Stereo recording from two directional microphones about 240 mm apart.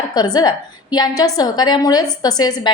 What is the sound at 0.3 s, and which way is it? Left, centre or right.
A woman's voice, centre.